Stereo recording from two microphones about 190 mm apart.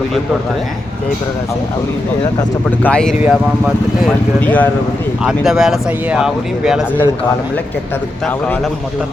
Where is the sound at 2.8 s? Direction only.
5° left (ahead or behind).